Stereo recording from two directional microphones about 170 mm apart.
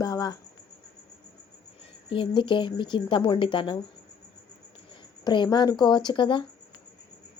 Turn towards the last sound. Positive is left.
turn(degrees=30)  # may be behind; listen again after turning